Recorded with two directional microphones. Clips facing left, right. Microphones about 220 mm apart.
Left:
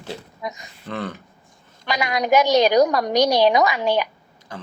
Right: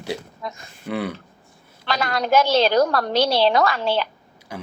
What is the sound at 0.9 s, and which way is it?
Speech, 10° right (ahead or behind).